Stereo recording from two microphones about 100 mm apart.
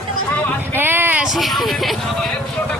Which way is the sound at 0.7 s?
20° right (ahead or behind).